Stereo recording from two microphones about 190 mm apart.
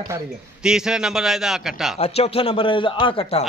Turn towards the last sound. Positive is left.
turn(degrees=30)  # may be behind; listen again after turning